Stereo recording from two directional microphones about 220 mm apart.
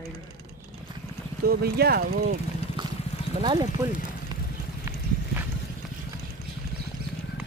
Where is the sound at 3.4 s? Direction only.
20° right (ahead or behind).